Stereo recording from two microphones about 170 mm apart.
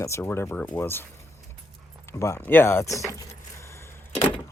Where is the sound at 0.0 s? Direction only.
15° left (ahead or behind).